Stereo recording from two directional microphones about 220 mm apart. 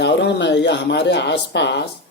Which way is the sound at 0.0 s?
50° left (ahead or behind).